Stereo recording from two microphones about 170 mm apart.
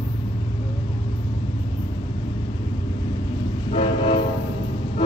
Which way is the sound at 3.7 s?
35° left (ahead or behind).